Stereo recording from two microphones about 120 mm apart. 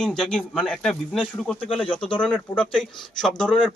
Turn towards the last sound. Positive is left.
turn(degrees=5)  # may be behind; listen again after turning